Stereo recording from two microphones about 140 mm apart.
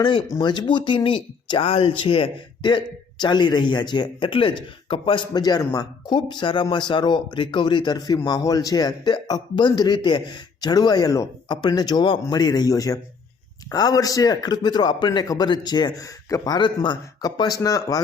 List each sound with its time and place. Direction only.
0.0 s a man's voice: 35° left (ahead or behind)